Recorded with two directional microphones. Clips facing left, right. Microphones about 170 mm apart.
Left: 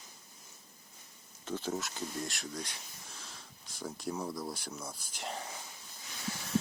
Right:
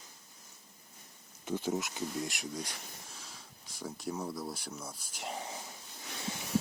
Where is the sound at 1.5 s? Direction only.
10° right (ahead or behind).